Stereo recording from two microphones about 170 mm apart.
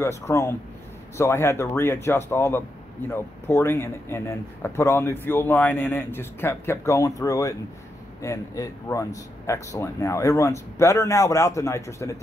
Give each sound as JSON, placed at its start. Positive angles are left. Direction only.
{"t": 0.0, "sound": "speech", "side_deg": 15}